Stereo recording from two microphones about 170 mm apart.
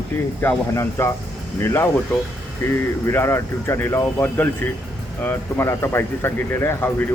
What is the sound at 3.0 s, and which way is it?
Speech, 15° left (ahead or behind).